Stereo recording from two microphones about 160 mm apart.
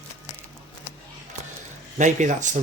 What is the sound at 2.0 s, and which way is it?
Speech, 50° right (ahead or behind).